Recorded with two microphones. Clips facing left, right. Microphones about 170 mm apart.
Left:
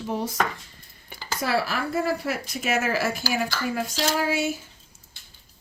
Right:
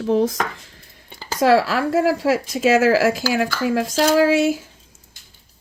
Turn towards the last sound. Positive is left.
turn(degrees=-90)